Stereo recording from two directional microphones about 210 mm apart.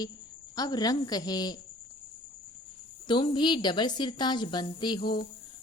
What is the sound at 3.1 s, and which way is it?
A woman's voice, 25° left (ahead or behind).